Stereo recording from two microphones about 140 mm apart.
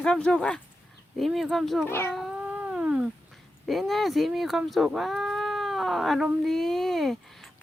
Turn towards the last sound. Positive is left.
turn(degrees=0)  # may be behind; listen again after turning